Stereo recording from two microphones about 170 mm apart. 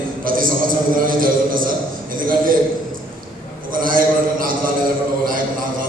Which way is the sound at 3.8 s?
55° right (ahead or behind).